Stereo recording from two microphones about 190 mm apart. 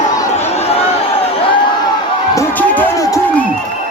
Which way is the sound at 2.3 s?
10° left (ahead or behind).